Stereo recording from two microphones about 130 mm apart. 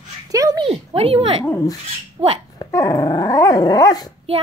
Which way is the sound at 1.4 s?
25° left (ahead or behind).